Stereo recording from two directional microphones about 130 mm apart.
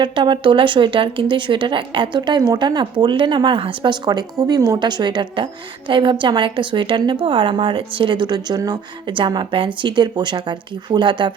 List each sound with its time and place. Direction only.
0.0 s speech: 40° right (ahead or behind)